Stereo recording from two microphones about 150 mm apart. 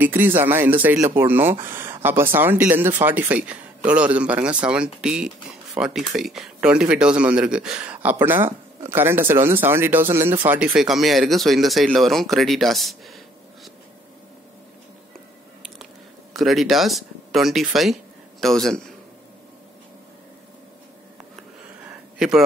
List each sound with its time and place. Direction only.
0.0 s a man's voice: 15° right (ahead or behind)
16.3 s speech: centre (ahead or behind)